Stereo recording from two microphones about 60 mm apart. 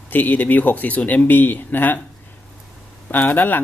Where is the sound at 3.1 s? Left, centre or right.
Left.